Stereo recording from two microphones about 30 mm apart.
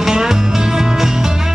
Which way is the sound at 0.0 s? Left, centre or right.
Centre.